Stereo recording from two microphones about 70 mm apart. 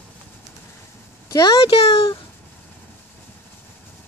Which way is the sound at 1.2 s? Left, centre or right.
Left.